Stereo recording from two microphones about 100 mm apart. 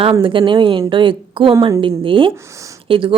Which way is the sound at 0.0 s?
60° right (ahead or behind).